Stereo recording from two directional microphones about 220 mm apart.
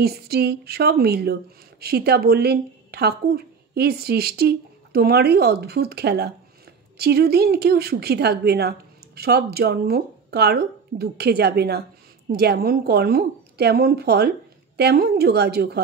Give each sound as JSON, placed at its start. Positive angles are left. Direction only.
{"t": 0.0, "sound": "a woman's voice", "side_deg": -45}